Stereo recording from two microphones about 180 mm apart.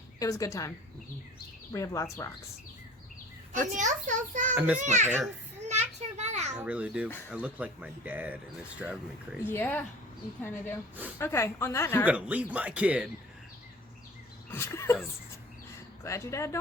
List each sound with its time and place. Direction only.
0.2 s a woman's voice: 20° left (ahead or behind)
1.7 s a woman's voice: 15° left (ahead or behind)
3.8 s a child's voice: 45° right (ahead or behind)
4.5 s speech: 10° right (ahead or behind)
4.8 s a child's voice: 40° right (ahead or behind)
5.6 s children playing: 40° right (ahead or behind)
6.6 s speech: 5° right (ahead or behind)
9.4 s a woman's voice: 10° left (ahead or behind)
11.2 s a woman's voice: 15° left (ahead or behind)
12.0 s speech: 10° right (ahead or behind)
14.5 s speech: 15° left (ahead or behind)
16.0 s a woman's voice: 15° left (ahead or behind)